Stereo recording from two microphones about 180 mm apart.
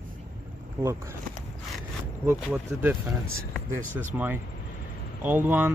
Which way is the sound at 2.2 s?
10° right (ahead or behind).